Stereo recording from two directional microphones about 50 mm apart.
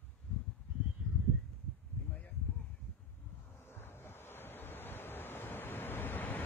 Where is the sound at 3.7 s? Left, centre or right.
Left.